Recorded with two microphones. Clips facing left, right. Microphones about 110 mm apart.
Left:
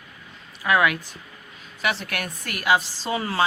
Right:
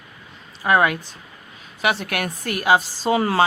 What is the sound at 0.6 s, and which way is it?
Speech, 35° right (ahead or behind).